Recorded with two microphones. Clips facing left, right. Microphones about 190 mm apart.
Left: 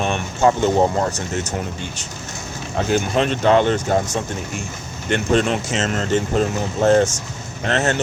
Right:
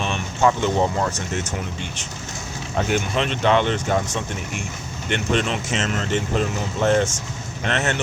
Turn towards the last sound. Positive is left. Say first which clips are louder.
# left 4 dB
turn(degrees=35)  # may be behind; listen again after turning